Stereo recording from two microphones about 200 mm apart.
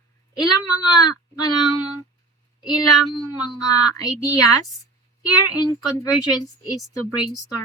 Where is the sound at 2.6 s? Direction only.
20° left (ahead or behind).